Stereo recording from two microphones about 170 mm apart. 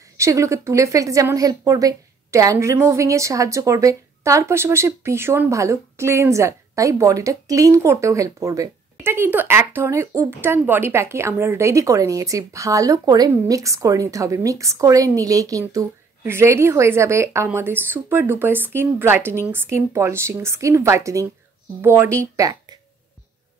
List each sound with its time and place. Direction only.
0.2 s a woman's voice: 20° right (ahead or behind)